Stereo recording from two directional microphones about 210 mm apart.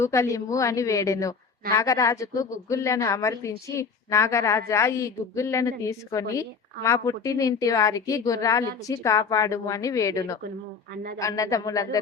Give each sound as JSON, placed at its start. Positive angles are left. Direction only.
{"t": 0.0, "sound": "a woman's voice", "side_deg": 15}